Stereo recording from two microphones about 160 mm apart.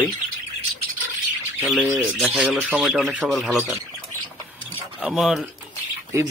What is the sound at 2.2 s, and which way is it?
Speech, 10° right (ahead or behind).